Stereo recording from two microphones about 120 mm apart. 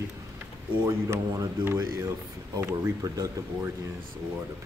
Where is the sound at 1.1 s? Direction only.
20° right (ahead or behind).